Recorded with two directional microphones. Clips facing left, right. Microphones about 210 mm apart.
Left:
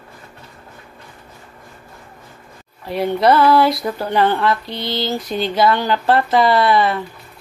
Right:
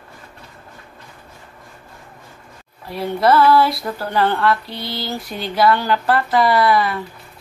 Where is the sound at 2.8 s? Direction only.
20° left (ahead or behind).